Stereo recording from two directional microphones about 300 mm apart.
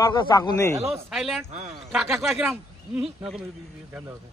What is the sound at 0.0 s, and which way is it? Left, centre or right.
Speech, centre.